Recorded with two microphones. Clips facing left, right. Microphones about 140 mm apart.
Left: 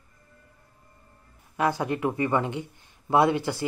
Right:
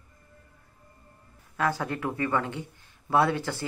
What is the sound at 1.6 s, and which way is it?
Speech, 15° left (ahead or behind).